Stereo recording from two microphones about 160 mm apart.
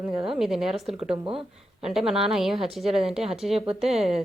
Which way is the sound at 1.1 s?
30° right (ahead or behind).